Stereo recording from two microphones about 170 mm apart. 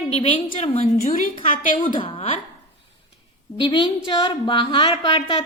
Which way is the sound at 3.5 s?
30° left (ahead or behind).